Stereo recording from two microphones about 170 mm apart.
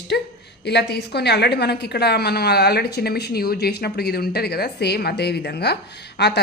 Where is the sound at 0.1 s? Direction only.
75° left (ahead or behind).